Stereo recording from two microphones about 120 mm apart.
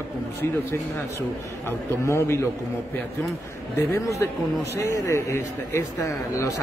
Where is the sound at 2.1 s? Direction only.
20° left (ahead or behind).